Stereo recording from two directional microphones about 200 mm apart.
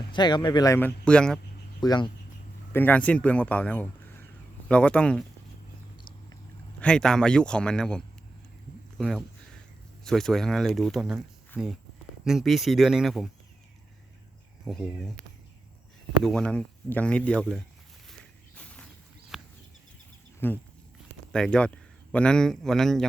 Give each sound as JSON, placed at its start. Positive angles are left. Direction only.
{"t": 0.1, "sound": "speech", "side_deg": 20}
{"t": 1.8, "sound": "speech", "side_deg": 20}
{"t": 2.7, "sound": "a man's voice", "side_deg": 10}
{"t": 6.7, "sound": "speech", "side_deg": 5}
{"t": 9.0, "sound": "a sound", "side_deg": 0}
{"t": 10.0, "sound": "speech", "side_deg": 0}
{"t": 14.6, "sound": "speech", "side_deg": 5}
{"t": 16.2, "sound": "speech", "side_deg": 5}
{"t": 18.5, "sound": "a sound", "side_deg": 5}
{"t": 20.4, "sound": "speech", "side_deg": 10}